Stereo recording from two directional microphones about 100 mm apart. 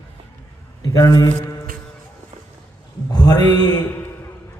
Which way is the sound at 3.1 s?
40° left (ahead or behind).